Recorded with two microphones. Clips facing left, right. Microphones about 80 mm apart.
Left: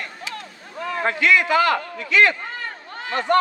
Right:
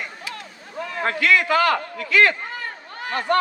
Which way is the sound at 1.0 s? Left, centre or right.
Left.